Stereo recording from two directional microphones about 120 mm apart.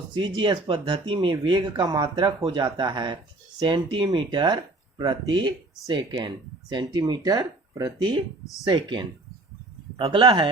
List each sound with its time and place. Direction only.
0.2 s speech: 40° right (ahead or behind)